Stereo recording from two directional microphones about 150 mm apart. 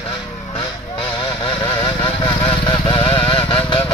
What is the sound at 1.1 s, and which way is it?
Vehicle, 35° left (ahead or behind).